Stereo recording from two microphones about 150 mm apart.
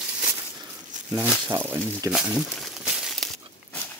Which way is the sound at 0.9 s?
55° right (ahead or behind).